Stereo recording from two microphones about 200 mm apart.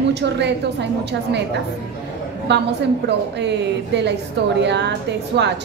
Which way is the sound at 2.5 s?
60° right (ahead or behind).